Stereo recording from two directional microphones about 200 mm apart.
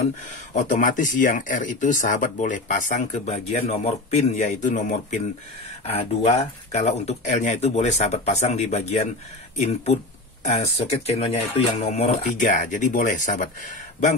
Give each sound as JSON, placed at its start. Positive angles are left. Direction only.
{"t": 0.2, "sound": "speech", "side_deg": 40}
{"t": 10.4, "sound": "speech", "side_deg": 35}